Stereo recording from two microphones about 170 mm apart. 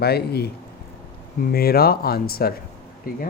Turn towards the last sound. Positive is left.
turn(degrees=60)  # may be behind; listen again after turning